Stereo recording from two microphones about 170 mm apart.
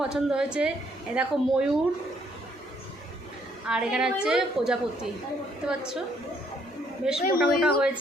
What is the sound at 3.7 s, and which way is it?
A woman's voice, 5° right (ahead or behind).